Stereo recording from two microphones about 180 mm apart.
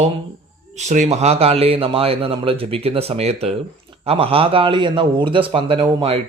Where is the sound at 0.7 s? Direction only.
40° right (ahead or behind).